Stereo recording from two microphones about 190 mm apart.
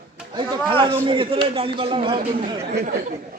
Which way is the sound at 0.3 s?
25° right (ahead or behind).